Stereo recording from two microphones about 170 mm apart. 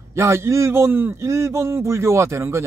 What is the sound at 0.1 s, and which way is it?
A man's voice, 15° right (ahead or behind).